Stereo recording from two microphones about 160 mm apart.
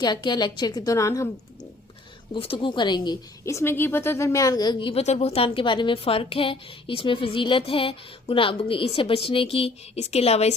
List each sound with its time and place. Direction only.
0.0 s a woman's voice: 25° left (ahead or behind)
2.3 s a woman's voice: 35° left (ahead or behind)